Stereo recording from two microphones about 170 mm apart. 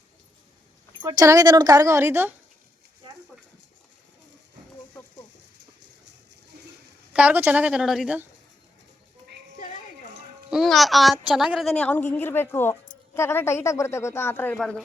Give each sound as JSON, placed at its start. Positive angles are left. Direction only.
{"t": 1.0, "sound": "a woman's voice", "side_deg": -20}
{"t": 7.1, "sound": "a woman's voice", "side_deg": -5}
{"t": 10.5, "sound": "a child's voice", "side_deg": 0}